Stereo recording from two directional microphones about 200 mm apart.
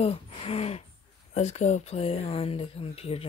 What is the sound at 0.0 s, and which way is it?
Speech, 30° left (ahead or behind).